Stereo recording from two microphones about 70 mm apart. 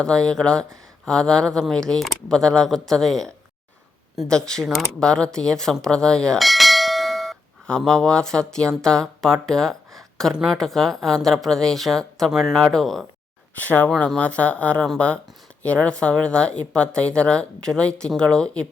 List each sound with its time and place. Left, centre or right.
0.0 s speech: centre
6.4 s clang: centre
10.5 s speech: centre
13.7 s speech: left